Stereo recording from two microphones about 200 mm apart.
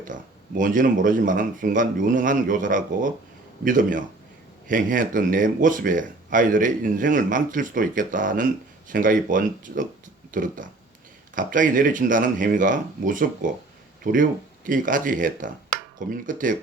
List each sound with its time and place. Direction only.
0.0 s speech: 40° right (ahead or behind)